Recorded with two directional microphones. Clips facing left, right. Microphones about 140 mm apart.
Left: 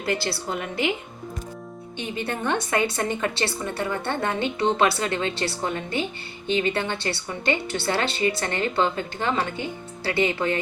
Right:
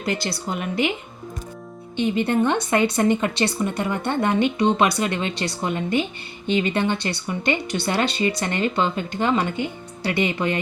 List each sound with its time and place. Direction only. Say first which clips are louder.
0.0 s a woman's voice: right 1 dB; 20° right (ahead or behind)
2.0 s a woman's voice: right 9 dB; 20° right (ahead or behind)